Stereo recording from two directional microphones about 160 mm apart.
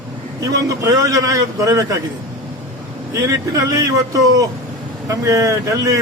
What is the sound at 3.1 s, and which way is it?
A man's voice, 20° right (ahead or behind).